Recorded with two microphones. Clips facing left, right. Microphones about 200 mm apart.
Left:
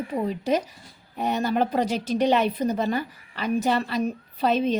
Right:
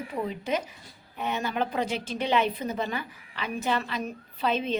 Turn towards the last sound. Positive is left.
turn(degrees=40)  # may be behind; listen again after turning